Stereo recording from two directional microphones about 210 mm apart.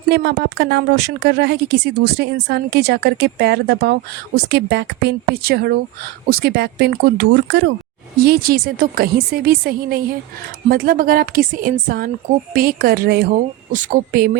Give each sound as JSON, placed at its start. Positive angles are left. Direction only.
{"t": 0.1, "sound": "a woman's voice", "side_deg": -55}